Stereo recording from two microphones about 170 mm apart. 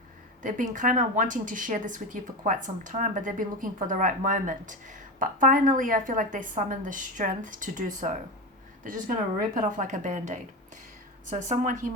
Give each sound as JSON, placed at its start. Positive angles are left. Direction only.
{"t": 0.4, "sound": "speech", "side_deg": -50}
{"t": 9.6, "sound": "speech", "side_deg": -50}